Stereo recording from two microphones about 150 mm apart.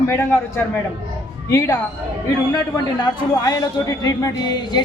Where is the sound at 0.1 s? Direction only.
15° left (ahead or behind).